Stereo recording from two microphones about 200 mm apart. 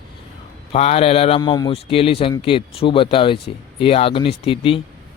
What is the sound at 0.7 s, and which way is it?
Speech, 30° left (ahead or behind).